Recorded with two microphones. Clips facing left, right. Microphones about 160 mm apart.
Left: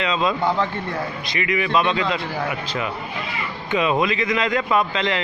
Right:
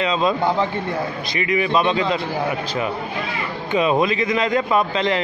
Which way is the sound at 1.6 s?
35° right (ahead or behind).